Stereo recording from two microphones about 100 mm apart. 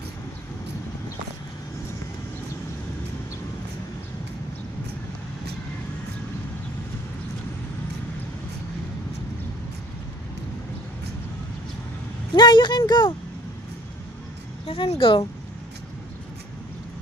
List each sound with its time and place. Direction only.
12.3 s a sound: 50° left (ahead or behind)
12.8 s speech: 45° left (ahead or behind)
14.7 s speech: 65° left (ahead or behind)